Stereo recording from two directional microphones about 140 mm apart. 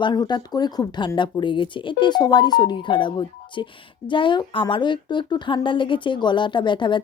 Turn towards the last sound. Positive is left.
turn(degrees=35)  # may be behind; listen again after turning